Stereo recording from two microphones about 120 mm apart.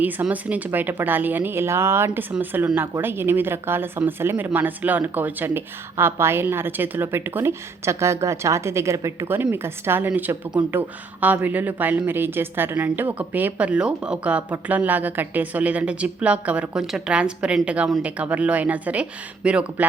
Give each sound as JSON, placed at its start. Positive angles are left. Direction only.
{"t": 0.0, "sound": "speech", "side_deg": -15}